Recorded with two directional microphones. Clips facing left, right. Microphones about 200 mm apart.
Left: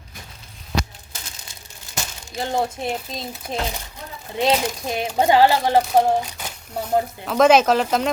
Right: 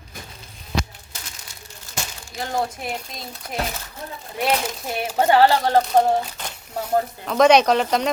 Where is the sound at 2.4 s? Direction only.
25° left (ahead or behind).